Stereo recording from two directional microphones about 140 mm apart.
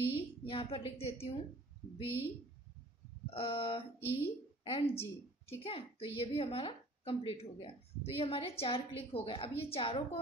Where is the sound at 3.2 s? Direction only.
45° left (ahead or behind).